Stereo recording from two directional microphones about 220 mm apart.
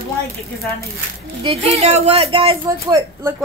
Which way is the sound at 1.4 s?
25° right (ahead or behind).